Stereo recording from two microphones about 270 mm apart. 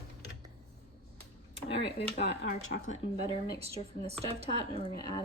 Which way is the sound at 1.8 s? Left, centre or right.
Left.